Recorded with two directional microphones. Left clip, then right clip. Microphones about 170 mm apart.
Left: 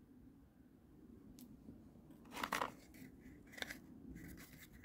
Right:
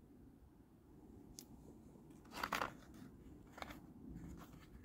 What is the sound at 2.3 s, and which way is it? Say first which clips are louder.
Scissors: left 1 dB; 10° right (ahead or behind).